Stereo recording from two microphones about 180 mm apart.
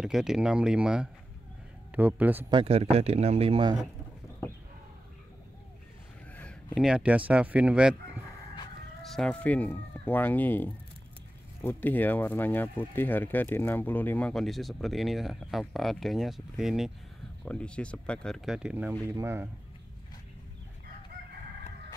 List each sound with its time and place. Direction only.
0.0 s speech: centre (ahead or behind)
2.5 s speech: 30° right (ahead or behind)
6.3 s a sound: 5° left (ahead or behind)
6.9 s speech: 5° right (ahead or behind)
9.0 s speech: 5° left (ahead or behind); by 19.5 s 15° right (ahead or behind)